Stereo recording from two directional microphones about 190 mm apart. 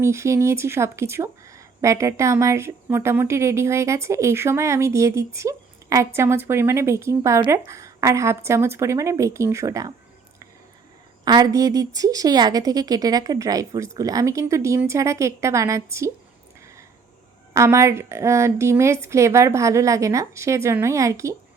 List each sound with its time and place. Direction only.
0.0 s speech: 15° right (ahead or behind)
11.3 s speech: 20° right (ahead or behind)
17.5 s speech: 15° right (ahead or behind)